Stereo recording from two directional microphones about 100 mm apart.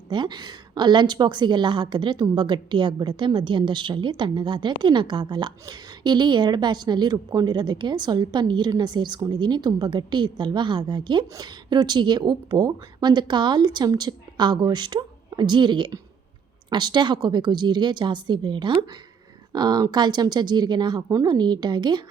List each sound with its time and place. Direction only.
0.1 s a woman's voice: 50° right (ahead or behind)